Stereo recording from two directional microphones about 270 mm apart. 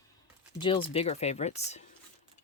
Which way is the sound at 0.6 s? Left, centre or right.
Centre.